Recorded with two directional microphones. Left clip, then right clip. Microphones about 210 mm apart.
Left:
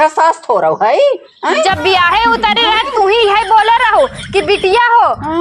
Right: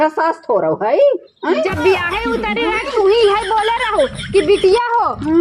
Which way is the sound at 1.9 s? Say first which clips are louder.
Left 9 dB; 30° right (ahead or behind).